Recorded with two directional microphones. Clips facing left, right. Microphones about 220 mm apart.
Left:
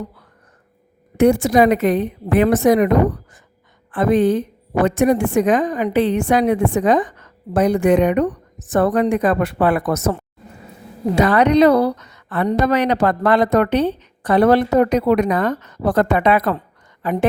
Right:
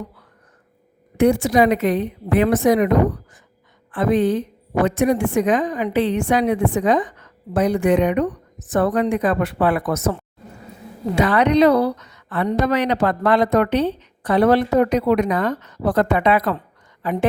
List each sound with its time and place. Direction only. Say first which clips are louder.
1.1 s a woman's voice: left 2 dB; 45° left (ahead or behind)
3.9 s a woman's voice: left 2 dB; 50° left (ahead or behind)